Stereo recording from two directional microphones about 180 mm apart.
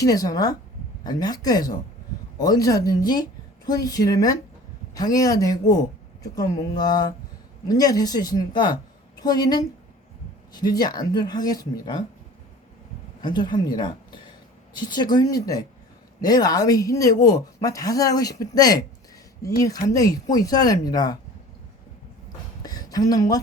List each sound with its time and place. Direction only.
0.0 s a woman's voice: 20° left (ahead or behind)
13.2 s a woman's voice: 25° left (ahead or behind)
22.6 s a sound: 20° left (ahead or behind)